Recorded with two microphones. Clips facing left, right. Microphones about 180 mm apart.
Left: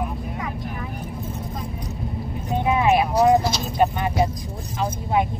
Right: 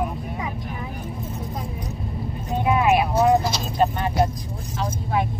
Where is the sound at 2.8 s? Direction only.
30° left (ahead or behind).